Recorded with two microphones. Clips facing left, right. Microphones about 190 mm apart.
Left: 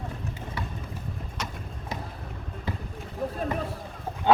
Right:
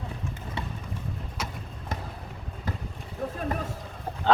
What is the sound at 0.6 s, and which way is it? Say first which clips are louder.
Boat: right 1 dB; 25° right (ahead or behind).